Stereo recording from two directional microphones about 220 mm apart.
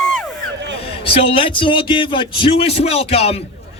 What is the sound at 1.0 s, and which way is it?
Speech, 25° left (ahead or behind).